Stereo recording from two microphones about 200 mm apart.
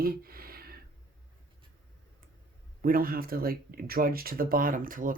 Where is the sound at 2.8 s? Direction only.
45° right (ahead or behind).